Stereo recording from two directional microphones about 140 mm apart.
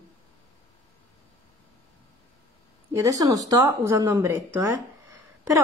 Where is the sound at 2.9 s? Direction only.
25° right (ahead or behind).